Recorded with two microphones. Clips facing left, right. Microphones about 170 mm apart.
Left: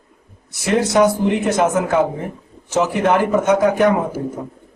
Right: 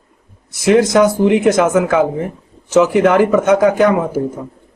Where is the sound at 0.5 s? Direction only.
90° right.